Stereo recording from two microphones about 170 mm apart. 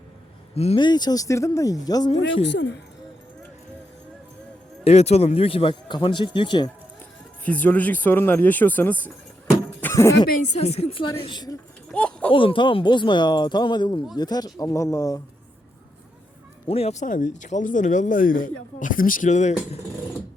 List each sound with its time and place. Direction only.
0.5 s speech: 35° left (ahead or behind)
2.2 s a woman's voice: 90° left
4.8 s a man's voice: 40° left (ahead or behind)
7.4 s speech: 10° left (ahead or behind)
10.5 s a man's voice: 40° left (ahead or behind)
11.9 s a sound: 5° left (ahead or behind)
12.3 s speech: 30° left (ahead or behind)
16.6 s speech: 35° left (ahead or behind)